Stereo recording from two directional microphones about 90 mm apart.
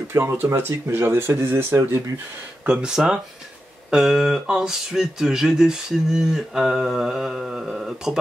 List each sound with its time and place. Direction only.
0.1 s speech: 25° right (ahead or behind)
2.6 s speech: 10° right (ahead or behind)